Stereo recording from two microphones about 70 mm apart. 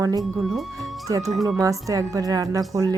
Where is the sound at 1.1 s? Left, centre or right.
Right.